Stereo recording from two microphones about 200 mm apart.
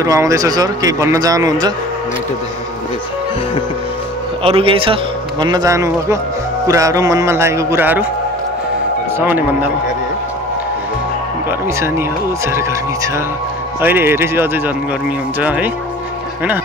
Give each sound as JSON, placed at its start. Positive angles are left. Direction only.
{"t": 0.0, "sound": "speech", "side_deg": -15}
{"t": 4.4, "sound": "a man's voice", "side_deg": -30}
{"t": 9.2, "sound": "speech", "side_deg": -10}
{"t": 12.4, "sound": "speech", "side_deg": -15}